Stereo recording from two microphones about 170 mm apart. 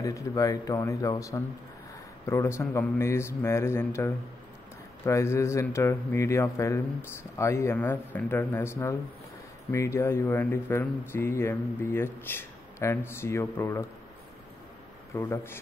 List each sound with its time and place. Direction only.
0.0 s a man's voice: 20° left (ahead or behind)
15.1 s speech: 15° left (ahead or behind)